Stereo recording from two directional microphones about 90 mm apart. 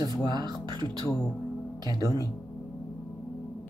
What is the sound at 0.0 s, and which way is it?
Speech, 45° right (ahead or behind).